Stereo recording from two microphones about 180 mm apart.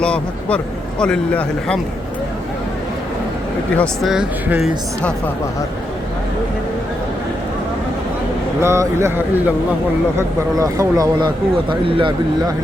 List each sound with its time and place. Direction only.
0.0 s a man's voice: 5° left (ahead or behind)
3.8 s a man's voice: centre (ahead or behind)
8.6 s speech: 15° right (ahead or behind)